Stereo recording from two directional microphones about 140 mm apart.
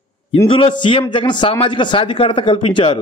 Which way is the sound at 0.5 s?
40° left (ahead or behind).